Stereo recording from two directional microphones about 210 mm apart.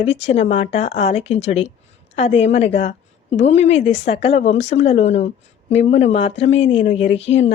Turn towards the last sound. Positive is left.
turn(degrees=30)  # may be behind; listen again after turning